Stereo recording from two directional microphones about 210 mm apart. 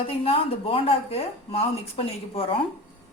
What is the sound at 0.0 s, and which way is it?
Speech, 25° left (ahead or behind).